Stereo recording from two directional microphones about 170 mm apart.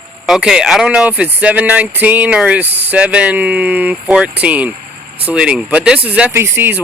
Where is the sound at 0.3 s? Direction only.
5° right (ahead or behind).